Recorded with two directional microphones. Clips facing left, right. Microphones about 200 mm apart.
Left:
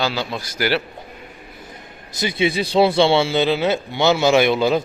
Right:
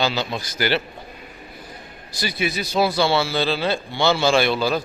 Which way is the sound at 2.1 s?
25° left (ahead or behind).